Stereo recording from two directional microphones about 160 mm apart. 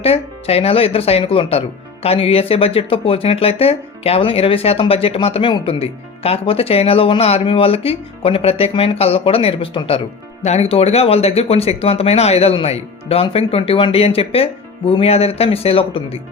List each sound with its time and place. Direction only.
0.0 s speech: 40° left (ahead or behind)